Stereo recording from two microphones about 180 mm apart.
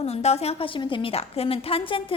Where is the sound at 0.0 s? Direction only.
35° left (ahead or behind).